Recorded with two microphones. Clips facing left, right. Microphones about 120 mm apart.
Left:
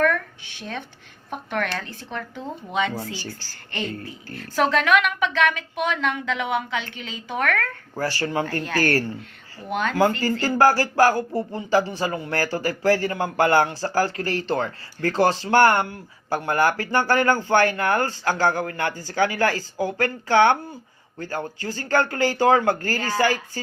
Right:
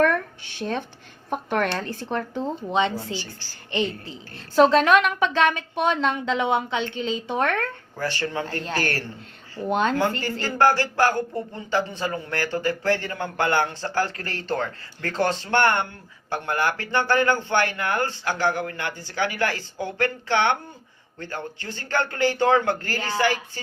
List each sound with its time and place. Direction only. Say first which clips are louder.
1.3 s a woman's voice: right 3 dB; 35° right (ahead or behind)
7.9 s speech: left 3 dB; 40° left (ahead or behind)
8.4 s a woman's voice: left 4 dB; 25° right (ahead or behind)
10.0 s speech: left 4 dB; 35° left (ahead or behind)